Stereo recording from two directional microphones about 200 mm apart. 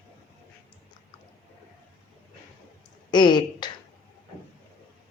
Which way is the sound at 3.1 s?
20° left (ahead or behind).